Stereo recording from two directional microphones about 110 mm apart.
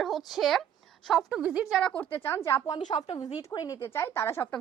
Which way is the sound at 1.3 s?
10° right (ahead or behind).